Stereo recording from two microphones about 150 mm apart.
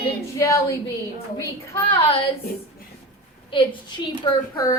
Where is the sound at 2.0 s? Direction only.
40° left (ahead or behind).